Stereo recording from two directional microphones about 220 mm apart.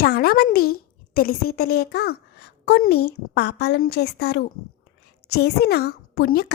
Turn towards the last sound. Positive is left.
turn(degrees=45)  # may be behind; listen again after turning